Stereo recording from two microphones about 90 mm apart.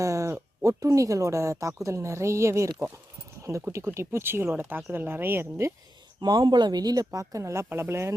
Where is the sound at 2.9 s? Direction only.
35° right (ahead or behind).